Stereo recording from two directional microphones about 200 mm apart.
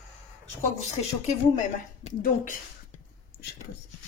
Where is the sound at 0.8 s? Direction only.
35° left (ahead or behind).